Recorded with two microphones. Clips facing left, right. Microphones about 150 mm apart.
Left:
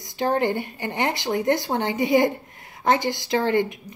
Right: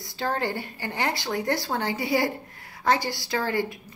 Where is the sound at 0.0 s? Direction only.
20° left (ahead or behind).